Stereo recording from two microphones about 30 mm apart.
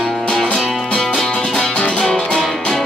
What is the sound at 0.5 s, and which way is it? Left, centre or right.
Music, centre.